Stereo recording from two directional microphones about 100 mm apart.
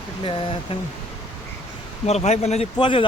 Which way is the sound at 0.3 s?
65° left (ahead or behind).